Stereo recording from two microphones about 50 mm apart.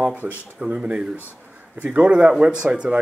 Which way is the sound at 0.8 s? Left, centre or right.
Centre.